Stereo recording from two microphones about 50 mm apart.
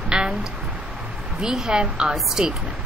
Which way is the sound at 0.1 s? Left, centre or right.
Centre.